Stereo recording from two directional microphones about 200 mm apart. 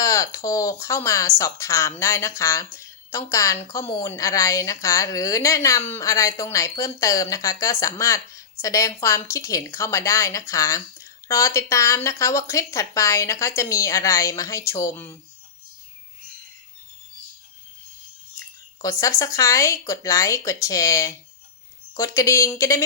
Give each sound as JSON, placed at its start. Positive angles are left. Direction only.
{"t": 0.0, "sound": "a woman's voice", "side_deg": 15}
{"t": 18.8, "sound": "a woman's voice", "side_deg": 15}